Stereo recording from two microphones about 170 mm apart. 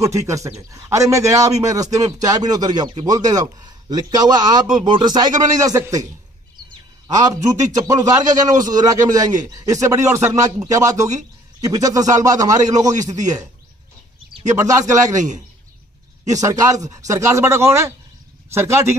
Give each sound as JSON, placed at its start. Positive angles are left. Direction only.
{"t": 0.0, "sound": "a man's voice", "side_deg": -20}
{"t": 7.2, "sound": "a man's voice", "side_deg": -20}
{"t": 15.1, "sound": "a man's voice", "side_deg": -45}
{"t": 16.3, "sound": "a man's voice", "side_deg": -20}